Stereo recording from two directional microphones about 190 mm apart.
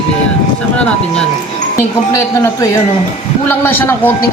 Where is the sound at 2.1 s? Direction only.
15° left (ahead or behind).